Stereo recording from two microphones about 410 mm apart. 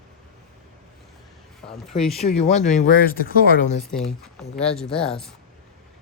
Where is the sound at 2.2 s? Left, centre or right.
Centre.